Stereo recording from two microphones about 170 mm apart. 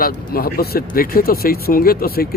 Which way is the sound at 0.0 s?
60° left (ahead or behind).